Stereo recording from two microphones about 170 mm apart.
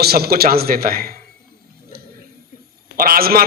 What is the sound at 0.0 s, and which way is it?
A man's voice, 65° right (ahead or behind).